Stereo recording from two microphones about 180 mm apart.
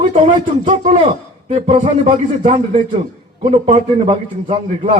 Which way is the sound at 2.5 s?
45° right (ahead or behind).